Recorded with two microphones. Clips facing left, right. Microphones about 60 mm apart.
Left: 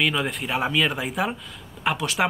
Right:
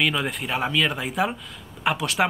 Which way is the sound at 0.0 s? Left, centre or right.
Centre.